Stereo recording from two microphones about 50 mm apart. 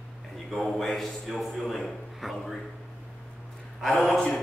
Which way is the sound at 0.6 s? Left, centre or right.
Centre.